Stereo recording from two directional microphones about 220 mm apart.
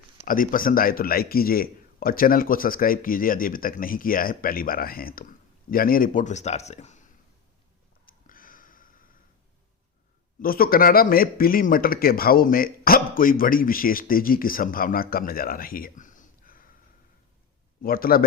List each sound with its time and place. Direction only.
0.3 s speech: 40° left (ahead or behind)
8.0 s a sound: 40° left (ahead or behind)
10.4 s speech: 40° left (ahead or behind)
17.8 s speech: 40° left (ahead or behind)